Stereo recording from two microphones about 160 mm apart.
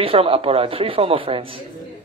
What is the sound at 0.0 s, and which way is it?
Speech, 35° right (ahead or behind).